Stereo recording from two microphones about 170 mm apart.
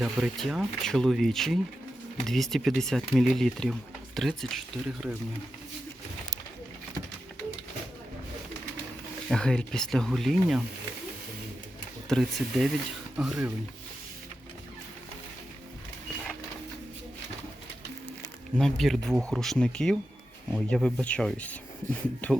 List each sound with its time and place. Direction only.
0.0 s speech: centre (ahead or behind)
9.3 s speech: 5° left (ahead or behind)
12.0 s speech: centre (ahead or behind)
18.5 s speech: centre (ahead or behind)
21.8 s speech: 15° right (ahead or behind)
22.2 s speech: 5° left (ahead or behind)